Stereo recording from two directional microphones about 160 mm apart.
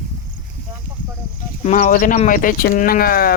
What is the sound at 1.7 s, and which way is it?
Speech, 60° left (ahead or behind).